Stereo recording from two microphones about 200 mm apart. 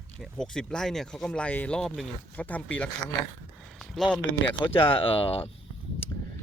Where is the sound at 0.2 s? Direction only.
Centre (ahead or behind).